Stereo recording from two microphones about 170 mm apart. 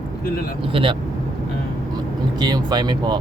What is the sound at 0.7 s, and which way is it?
Speech, 30° right (ahead or behind).